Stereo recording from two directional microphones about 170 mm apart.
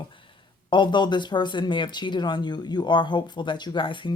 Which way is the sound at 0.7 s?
25° left (ahead or behind).